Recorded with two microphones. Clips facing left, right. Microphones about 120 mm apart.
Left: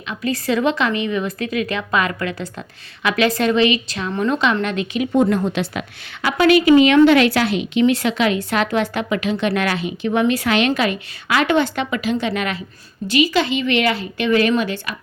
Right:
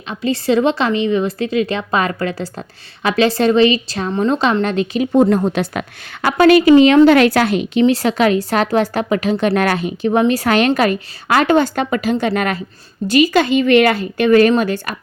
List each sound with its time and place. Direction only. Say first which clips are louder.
0.1 s a woman's voice: right 4 dB; 30° right (ahead or behind); by 14.9 s 45° right (ahead or behind)